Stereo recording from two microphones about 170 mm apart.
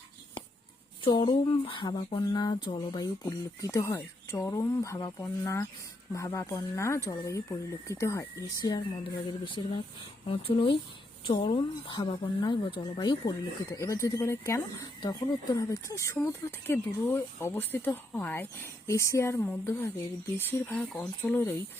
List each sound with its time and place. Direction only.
1.0 s speech: 30° left (ahead or behind)
20.5 s speech: 10° left (ahead or behind)